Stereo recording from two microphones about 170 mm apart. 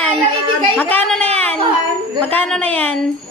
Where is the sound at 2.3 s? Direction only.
5° left (ahead or behind).